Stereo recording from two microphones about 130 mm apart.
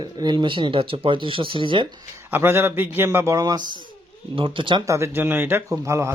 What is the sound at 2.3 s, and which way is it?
A man's voice, 20° right (ahead or behind).